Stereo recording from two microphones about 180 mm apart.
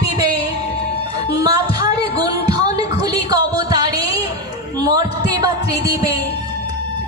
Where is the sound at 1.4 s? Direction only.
20° right (ahead or behind).